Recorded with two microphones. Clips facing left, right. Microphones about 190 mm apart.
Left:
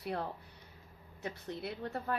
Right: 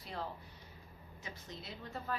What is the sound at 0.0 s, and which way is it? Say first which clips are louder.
A woman's voice: left 5 dB; 60° left (ahead or behind).